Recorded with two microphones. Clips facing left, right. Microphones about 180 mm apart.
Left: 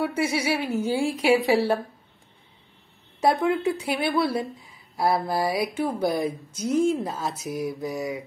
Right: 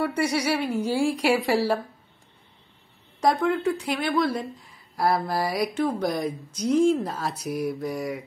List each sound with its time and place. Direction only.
0.0 s speech: 5° left (ahead or behind)
3.2 s speech: 5° left (ahead or behind)
5.3 s a sound: 25° left (ahead or behind)
5.8 s speech: 10° left (ahead or behind)